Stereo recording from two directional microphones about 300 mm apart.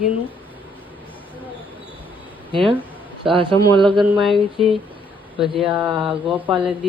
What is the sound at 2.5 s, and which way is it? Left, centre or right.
Speech, centre.